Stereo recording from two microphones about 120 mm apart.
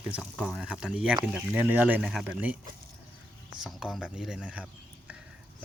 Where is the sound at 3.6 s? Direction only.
5° right (ahead or behind).